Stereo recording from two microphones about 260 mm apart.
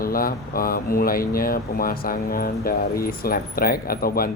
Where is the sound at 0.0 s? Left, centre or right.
Left.